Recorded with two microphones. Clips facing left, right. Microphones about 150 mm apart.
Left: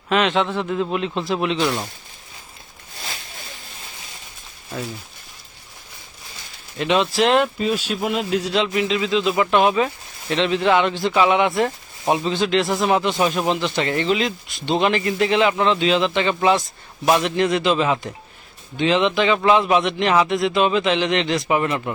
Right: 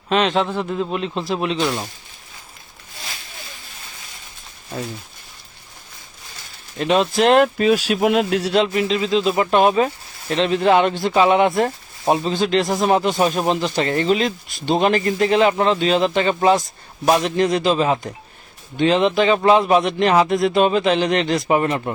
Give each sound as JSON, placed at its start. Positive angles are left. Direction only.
{"t": 0.1, "sound": "speech", "side_deg": -35}
{"t": 0.4, "sound": "a man's voice", "side_deg": -5}
{"t": 1.4, "sound": "speech", "side_deg": -30}
{"t": 6.7, "sound": "speech", "side_deg": -40}
{"t": 8.6, "sound": "speech", "side_deg": -40}